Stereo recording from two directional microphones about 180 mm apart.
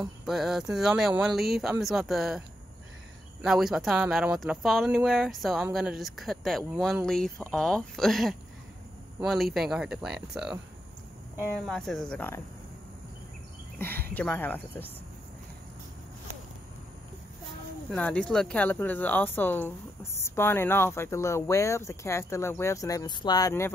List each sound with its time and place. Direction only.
0.2 s speech: centre (ahead or behind)
3.4 s speech: centre (ahead or behind)
13.7 s cricket: 10° left (ahead or behind)
14.1 s speech: 10° left (ahead or behind)
17.9 s speech: 5° left (ahead or behind)